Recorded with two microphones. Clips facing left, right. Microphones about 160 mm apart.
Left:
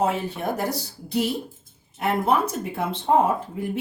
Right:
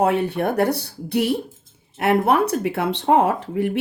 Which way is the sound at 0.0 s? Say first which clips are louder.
Right 5 dB; 60° right (ahead or behind).